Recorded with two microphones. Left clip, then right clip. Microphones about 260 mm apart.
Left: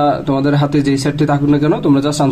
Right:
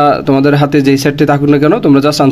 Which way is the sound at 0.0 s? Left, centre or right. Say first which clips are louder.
Right 6 dB; right.